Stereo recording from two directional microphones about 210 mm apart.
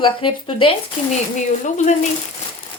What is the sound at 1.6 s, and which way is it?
Speech, 35° left (ahead or behind).